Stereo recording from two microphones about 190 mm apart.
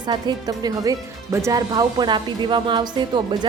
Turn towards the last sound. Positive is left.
turn(degrees=-25)  # may be behind; listen again after turning